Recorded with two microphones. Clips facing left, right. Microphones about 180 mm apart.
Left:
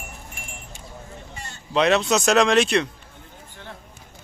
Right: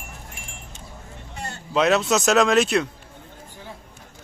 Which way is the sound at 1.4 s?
60° right (ahead or behind).